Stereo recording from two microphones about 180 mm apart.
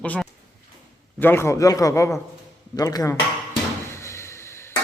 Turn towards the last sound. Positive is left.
turn(degrees=15)  # may be behind; listen again after turning